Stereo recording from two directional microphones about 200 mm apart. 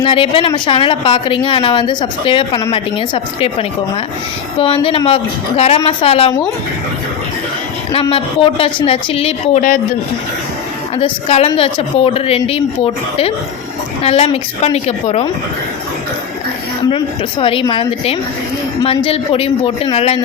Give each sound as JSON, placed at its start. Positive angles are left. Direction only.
{"t": 0.0, "sound": "speech", "side_deg": 25}
{"t": 4.6, "sound": "speech", "side_deg": 25}
{"t": 8.0, "sound": "speech", "side_deg": 30}
{"t": 10.9, "sound": "a woman's voice", "side_deg": 30}
{"t": 17.4, "sound": "speech", "side_deg": 25}